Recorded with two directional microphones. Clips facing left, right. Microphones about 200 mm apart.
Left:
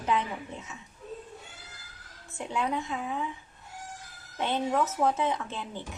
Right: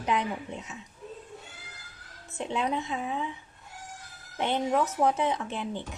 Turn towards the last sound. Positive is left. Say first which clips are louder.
# right 3 dB
turn(degrees=-15)  # may be behind; listen again after turning